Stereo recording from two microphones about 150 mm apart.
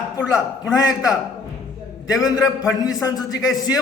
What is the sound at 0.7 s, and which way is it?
Speech, 25° left (ahead or behind).